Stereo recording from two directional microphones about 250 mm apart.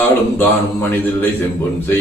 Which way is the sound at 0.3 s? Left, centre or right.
Centre.